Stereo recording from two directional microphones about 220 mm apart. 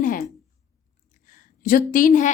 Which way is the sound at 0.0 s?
40° left (ahead or behind).